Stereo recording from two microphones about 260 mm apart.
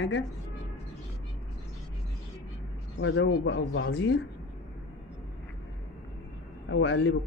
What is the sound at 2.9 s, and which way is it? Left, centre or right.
A man's voice, left.